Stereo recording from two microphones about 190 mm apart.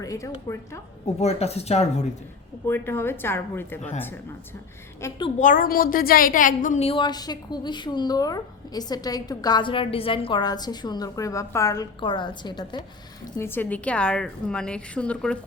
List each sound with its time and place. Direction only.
0.0 s speech: 15° left (ahead or behind)
1.0 s speech: 35° left (ahead or behind)
2.6 s speech: 10° left (ahead or behind)
5.0 s speech: 15° left (ahead or behind)
5.4 s a woman's voice: 45° left (ahead or behind); by 12.8 s 25° left (ahead or behind)
13.4 s a woman's voice: 10° left (ahead or behind)